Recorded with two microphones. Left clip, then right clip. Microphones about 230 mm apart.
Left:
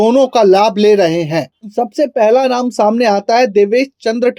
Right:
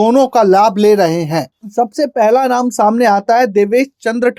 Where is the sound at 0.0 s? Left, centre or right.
Right.